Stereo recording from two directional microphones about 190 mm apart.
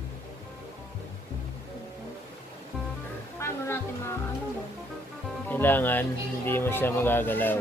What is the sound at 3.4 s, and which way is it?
Speech, 15° left (ahead or behind).